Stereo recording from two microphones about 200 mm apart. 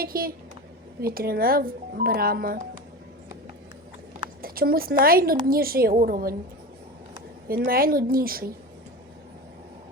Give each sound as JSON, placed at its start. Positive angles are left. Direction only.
{"t": 0.0, "sound": "speech", "side_deg": -50}
{"t": 4.4, "sound": "speech", "side_deg": -50}
{"t": 7.4, "sound": "speech", "side_deg": -45}